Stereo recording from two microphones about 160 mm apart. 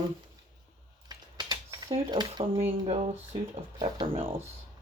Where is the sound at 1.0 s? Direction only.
25° right (ahead or behind).